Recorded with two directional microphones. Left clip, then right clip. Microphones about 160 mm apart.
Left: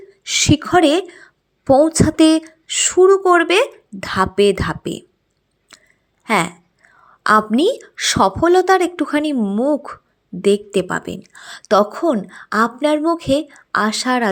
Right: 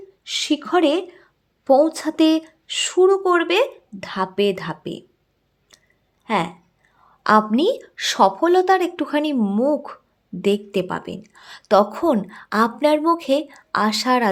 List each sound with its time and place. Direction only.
0.3 s a sound: 20° left (ahead or behind)
0.7 s a woman's voice: 10° left (ahead or behind)
5.7 s clicking: 20° left (ahead or behind)
6.2 s a woman's voice: 15° left (ahead or behind)